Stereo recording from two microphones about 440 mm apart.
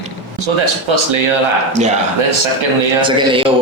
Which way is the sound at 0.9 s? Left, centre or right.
Right.